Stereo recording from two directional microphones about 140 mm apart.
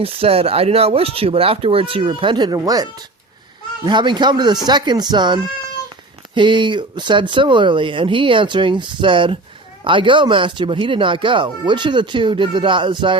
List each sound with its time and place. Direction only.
0.0 s speech: 40° right (ahead or behind)